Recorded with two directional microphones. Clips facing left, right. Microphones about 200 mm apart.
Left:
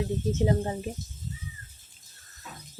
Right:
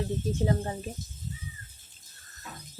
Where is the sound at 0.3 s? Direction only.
20° left (ahead or behind).